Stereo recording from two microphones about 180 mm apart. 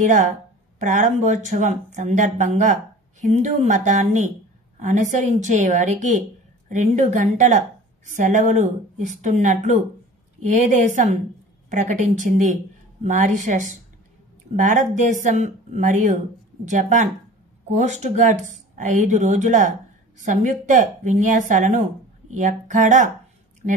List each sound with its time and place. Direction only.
0.0 s speech: 45° right (ahead or behind)